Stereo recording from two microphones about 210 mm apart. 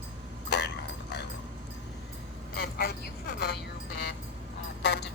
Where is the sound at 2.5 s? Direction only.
50° left (ahead or behind).